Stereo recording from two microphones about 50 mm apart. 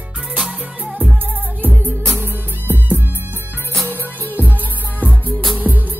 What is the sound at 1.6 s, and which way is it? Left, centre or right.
Music, right.